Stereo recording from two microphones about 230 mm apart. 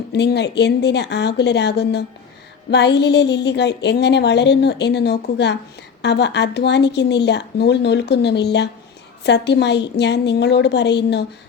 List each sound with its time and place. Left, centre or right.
0.1 s a woman's voice: left